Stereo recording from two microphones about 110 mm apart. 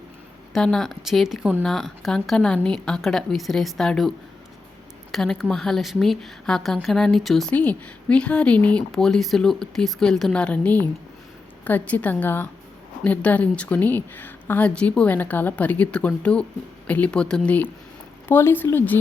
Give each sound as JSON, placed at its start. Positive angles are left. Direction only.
{"t": 0.5, "sound": "a woman's voice", "side_deg": 5}
{"t": 5.1, "sound": "a woman's voice", "side_deg": 5}
{"t": 7.5, "sound": "speech", "side_deg": 15}